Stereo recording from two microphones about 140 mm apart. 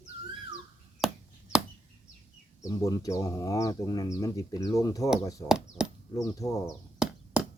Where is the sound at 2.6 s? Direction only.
25° left (ahead or behind).